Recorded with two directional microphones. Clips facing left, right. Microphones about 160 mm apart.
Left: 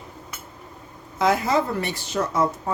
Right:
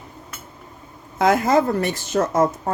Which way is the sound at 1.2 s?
50° right (ahead or behind).